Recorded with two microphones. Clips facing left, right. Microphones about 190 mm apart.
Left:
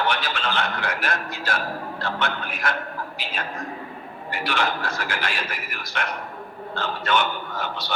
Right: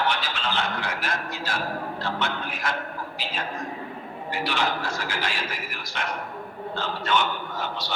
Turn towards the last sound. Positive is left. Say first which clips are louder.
# left 1 dB
turn(degrees=60)  # may be behind; listen again after turning